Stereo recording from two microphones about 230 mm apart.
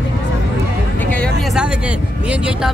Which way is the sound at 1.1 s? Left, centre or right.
Centre.